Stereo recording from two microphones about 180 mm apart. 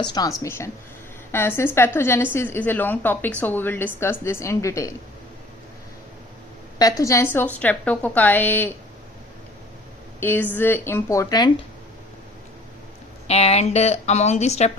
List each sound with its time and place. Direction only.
0.0 s a woman's voice: 20° left (ahead or behind)
6.7 s a woman's voice: 20° left (ahead or behind)
10.2 s a woman's voice: 10° left (ahead or behind)
13.2 s a woman's voice: 35° left (ahead or behind)